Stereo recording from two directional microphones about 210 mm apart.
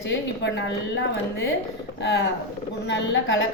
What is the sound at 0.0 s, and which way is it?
Speech, 55° left (ahead or behind).